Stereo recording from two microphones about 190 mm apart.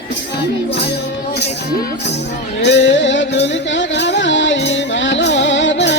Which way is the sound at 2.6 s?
70° left (ahead or behind).